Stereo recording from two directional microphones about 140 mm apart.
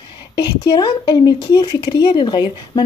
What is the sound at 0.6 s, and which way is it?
Speech, 35° left (ahead or behind).